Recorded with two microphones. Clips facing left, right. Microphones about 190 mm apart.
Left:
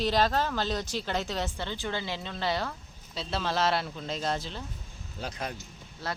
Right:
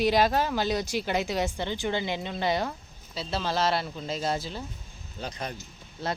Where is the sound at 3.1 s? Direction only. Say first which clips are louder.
Right 1 dB; centre (ahead or behind).